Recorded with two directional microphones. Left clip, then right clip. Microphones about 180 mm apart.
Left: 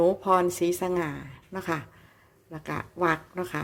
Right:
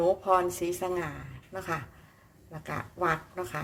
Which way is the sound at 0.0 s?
45° left (ahead or behind).